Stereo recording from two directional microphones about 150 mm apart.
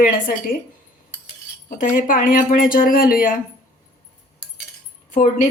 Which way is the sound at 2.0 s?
65° left (ahead or behind).